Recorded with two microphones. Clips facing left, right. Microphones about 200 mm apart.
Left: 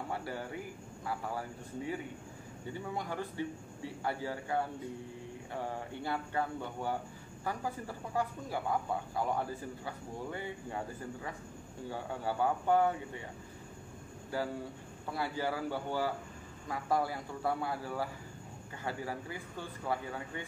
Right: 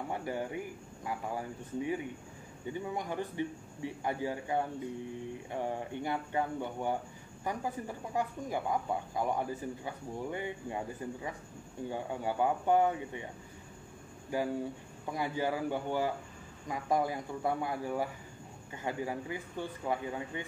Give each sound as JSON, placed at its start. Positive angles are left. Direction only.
{"t": 0.1, "sound": "speech", "side_deg": -15}
{"t": 11.9, "sound": "speech", "side_deg": -15}
{"t": 14.3, "sound": "speech", "side_deg": -15}